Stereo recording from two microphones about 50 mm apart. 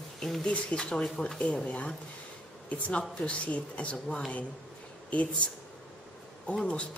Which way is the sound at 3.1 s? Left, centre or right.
Left.